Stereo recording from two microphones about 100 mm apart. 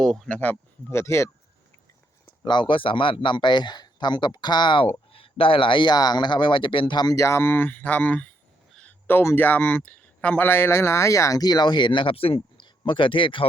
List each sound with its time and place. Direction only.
0.0 s speech: centre (ahead or behind)
0.3 s speech: 15° left (ahead or behind)
2.4 s speech: 50° left (ahead or behind)
5.1 s speech: 65° left (ahead or behind)